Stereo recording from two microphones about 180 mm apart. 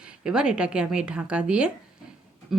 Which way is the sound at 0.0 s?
5° right (ahead or behind).